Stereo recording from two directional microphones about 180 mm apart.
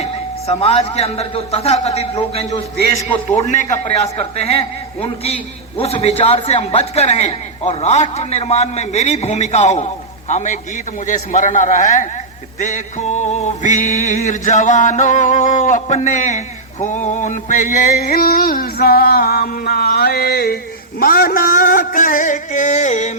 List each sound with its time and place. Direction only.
0.6 s a man's voice: 35° left (ahead or behind)
11.0 s music: 45° left (ahead or behind)
16.8 s a sound: 40° left (ahead or behind); by 20.6 s 60° left (ahead or behind)
21.0 s music: 55° left (ahead or behind)